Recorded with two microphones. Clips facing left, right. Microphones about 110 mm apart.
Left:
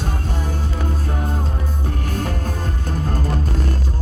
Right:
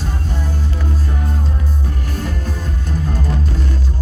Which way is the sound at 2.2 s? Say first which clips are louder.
Even; 50° left (ahead or behind).